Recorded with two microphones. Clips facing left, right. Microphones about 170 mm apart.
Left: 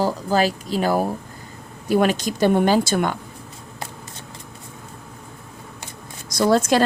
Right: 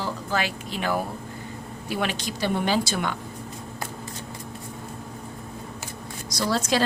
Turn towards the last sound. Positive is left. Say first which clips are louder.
# left 7 dB
turn(degrees=50)  # may be behind; listen again after turning